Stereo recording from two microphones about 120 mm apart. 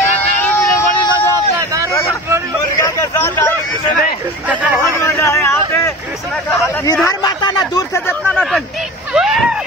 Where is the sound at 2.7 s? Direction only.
25° left (ahead or behind).